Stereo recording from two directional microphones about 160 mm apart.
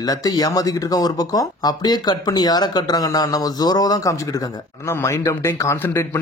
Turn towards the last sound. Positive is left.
turn(degrees=15)  # may be behind; listen again after turning